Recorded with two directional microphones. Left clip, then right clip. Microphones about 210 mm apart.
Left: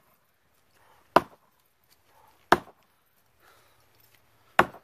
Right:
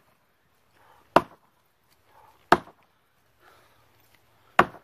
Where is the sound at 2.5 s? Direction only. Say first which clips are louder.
Right 2 dB; 10° right (ahead or behind).